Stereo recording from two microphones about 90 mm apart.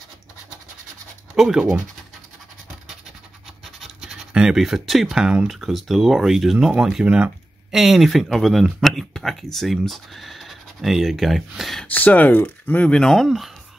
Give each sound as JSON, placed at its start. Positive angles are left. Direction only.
{"t": 1.3, "sound": "speech", "side_deg": -5}
{"t": 3.6, "sound": "scratch", "side_deg": -5}
{"t": 5.5, "sound": "speech", "side_deg": 0}
{"t": 11.9, "sound": "speech", "side_deg": 15}